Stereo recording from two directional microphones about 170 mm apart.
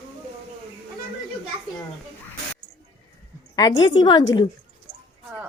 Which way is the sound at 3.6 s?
25° left (ahead or behind).